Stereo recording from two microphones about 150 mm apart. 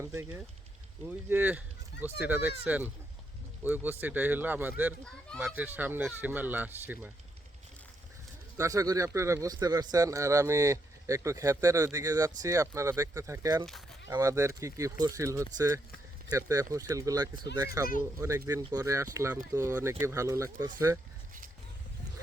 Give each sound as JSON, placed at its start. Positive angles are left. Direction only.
{"t": 0.0, "sound": "speech", "side_deg": -20}
{"t": 5.0, "sound": "speech", "side_deg": 5}
{"t": 5.5, "sound": "speech", "side_deg": -10}
{"t": 8.5, "sound": "a man's voice", "side_deg": -20}